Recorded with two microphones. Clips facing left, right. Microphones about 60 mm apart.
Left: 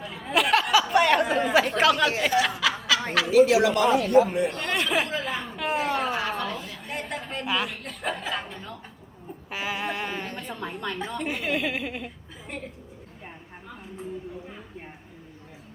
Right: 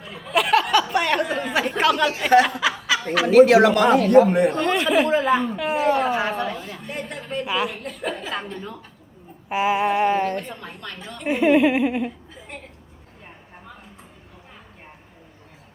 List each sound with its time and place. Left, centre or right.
0.0 s a sound: centre
1.5 s speech: centre
2.6 s snicker: centre
3.2 s a man's voice: right
4.6 s a woman's voice: centre
6.1 s a woman's voice: centre
6.6 s a woman's voice: right
6.8 s a woman's voice: centre
9.5 s a sound: right
10.6 s a woman's voice: centre
11.2 s a sound: right